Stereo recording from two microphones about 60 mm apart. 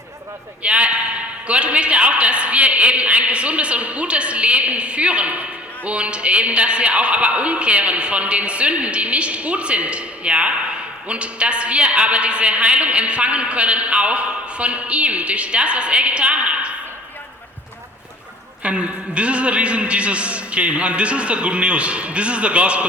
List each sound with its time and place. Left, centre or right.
0.6 s a man's voice: right
18.6 s a man's voice: centre